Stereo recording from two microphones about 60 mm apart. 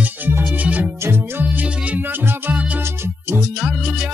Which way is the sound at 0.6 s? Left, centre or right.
Right.